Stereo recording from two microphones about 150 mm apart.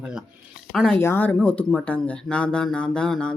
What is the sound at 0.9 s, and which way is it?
Speech, 15° left (ahead or behind).